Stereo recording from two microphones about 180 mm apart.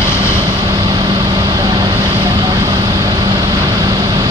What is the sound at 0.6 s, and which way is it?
Vehicle, 20° right (ahead or behind).